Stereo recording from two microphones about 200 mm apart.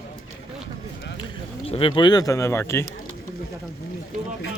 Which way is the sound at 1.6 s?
30° left (ahead or behind).